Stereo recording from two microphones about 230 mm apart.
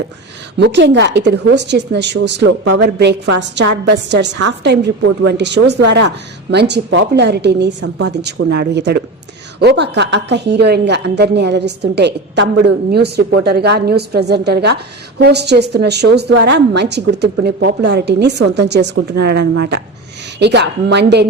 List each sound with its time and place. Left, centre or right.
0.6 s a woman's voice: right